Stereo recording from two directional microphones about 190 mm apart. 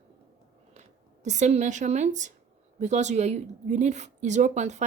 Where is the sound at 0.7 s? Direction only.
40° right (ahead or behind).